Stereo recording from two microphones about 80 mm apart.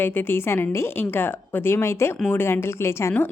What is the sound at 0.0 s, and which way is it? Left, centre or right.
A woman's voice, left.